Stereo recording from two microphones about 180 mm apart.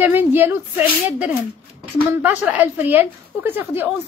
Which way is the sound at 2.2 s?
10° right (ahead or behind).